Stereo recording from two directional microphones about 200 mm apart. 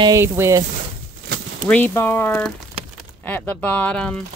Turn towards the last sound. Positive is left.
turn(degrees=5)  # may be behind; listen again after turning